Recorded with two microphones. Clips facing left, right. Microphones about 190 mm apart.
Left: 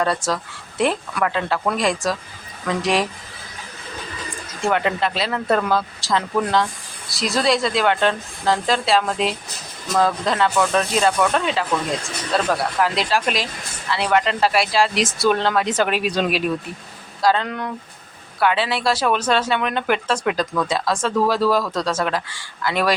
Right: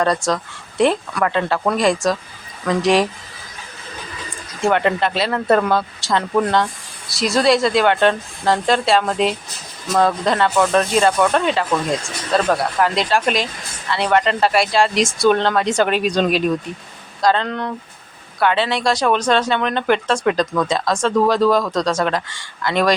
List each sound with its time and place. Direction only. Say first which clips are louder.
0.0 s speech: right 3 dB; 5° left (ahead or behind)
4.6 s speech: right 3 dB; centre (ahead or behind)
12.8 s speech: right 2 dB; centre (ahead or behind)